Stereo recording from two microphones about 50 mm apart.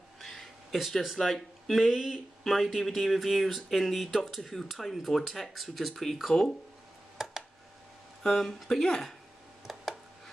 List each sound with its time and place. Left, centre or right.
0.2 s speech: centre
8.2 s speech: centre
9.7 s a sound: centre